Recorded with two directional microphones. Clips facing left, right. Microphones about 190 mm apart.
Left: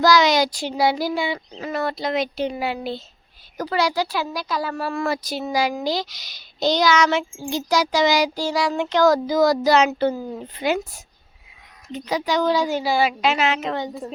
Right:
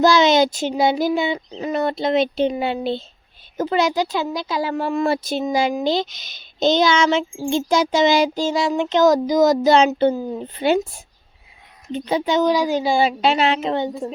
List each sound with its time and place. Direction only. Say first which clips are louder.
0.0 s speech: right 3 dB; 25° right (ahead or behind)
11.9 s speech: right 3 dB; 25° right (ahead or behind)